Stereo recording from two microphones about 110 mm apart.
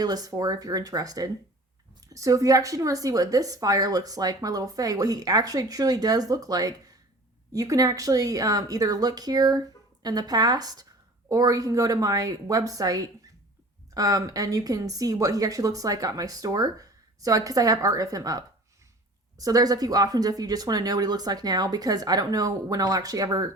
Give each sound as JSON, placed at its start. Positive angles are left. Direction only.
{"t": 0.0, "sound": "a woman's voice", "side_deg": -35}